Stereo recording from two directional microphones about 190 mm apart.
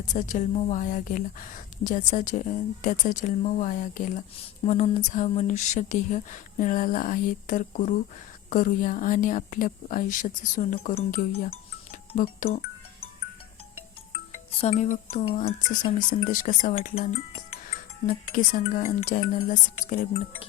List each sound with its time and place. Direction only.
0.1 s a woman's voice: 40° left (ahead or behind)
11.3 s music: 45° left (ahead or behind)
14.6 s a woman's voice: 35° left (ahead or behind)
18.0 s a woman's voice: 45° left (ahead or behind)